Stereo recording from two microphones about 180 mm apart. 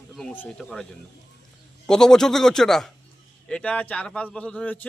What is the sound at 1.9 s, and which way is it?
Speech, 5° left (ahead or behind).